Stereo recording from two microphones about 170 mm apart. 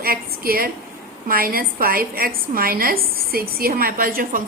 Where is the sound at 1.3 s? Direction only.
60° right (ahead or behind).